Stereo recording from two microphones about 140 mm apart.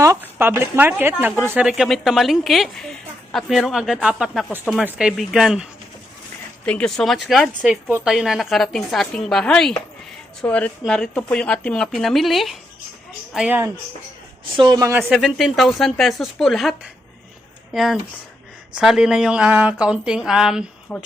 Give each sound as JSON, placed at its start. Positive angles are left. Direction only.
{"t": 0.0, "sound": "speech", "side_deg": -20}
{"t": 1.6, "sound": "speech", "side_deg": 0}
{"t": 6.7, "sound": "a woman's voice", "side_deg": 5}
{"t": 14.5, "sound": "a woman's voice", "side_deg": -35}
{"t": 14.8, "sound": "speech", "side_deg": -20}
{"t": 15.1, "sound": "speech", "side_deg": 0}
{"t": 18.7, "sound": "speech", "side_deg": -5}
{"t": 20.9, "sound": "a woman's voice", "side_deg": 10}